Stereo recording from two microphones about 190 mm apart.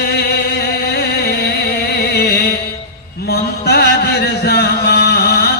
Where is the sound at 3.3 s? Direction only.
55° left (ahead or behind).